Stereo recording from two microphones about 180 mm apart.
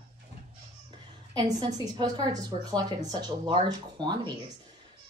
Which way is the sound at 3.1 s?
25° right (ahead or behind).